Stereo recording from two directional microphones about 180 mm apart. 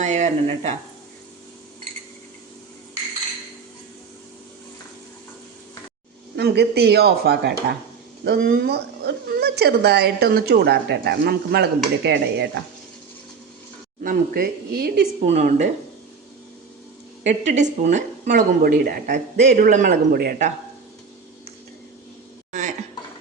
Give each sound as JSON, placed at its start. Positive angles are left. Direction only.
{"t": 0.0, "sound": "speech", "side_deg": -40}
{"t": 6.3, "sound": "speech", "side_deg": -65}
{"t": 14.0, "sound": "speech", "side_deg": -55}
{"t": 15.2, "sound": "speech", "side_deg": -40}
{"t": 17.2, "sound": "a woman's voice", "side_deg": -40}